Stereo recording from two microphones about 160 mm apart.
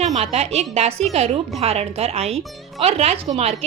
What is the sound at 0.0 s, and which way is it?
A woman's voice, 40° right (ahead or behind).